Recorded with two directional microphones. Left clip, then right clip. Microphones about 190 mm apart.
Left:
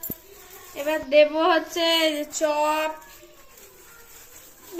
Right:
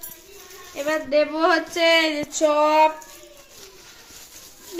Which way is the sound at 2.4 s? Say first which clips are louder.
Right 6 dB; 25° right (ahead or behind).